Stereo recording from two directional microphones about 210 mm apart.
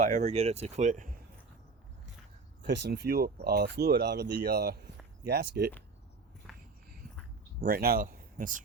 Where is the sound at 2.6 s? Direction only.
55° right (ahead or behind).